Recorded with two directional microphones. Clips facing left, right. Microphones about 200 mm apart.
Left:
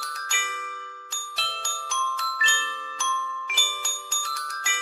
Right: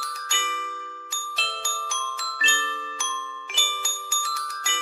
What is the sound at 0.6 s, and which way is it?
Glockenspiel, 10° right (ahead or behind).